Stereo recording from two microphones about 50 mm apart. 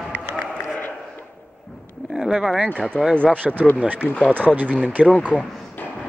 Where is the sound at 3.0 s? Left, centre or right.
Left.